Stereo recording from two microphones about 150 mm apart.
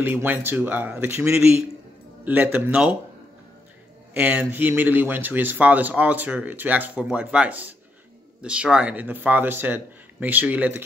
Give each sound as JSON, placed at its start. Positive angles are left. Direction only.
{"t": 0.0, "sound": "speech", "side_deg": -15}
{"t": 4.1, "sound": "speech", "side_deg": -10}